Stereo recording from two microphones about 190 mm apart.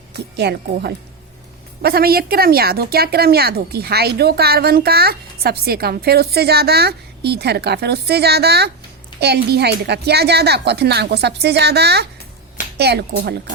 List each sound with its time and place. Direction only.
0.3 s speech: 60° right (ahead or behind)